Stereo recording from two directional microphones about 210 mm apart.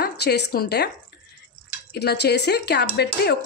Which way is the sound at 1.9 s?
50° left (ahead or behind).